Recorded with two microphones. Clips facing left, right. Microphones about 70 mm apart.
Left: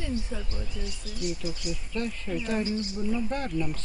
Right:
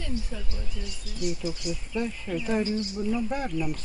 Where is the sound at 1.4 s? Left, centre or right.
Right.